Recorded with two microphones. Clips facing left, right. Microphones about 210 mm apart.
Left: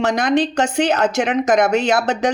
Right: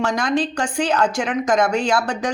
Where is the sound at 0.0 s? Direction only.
20° left (ahead or behind).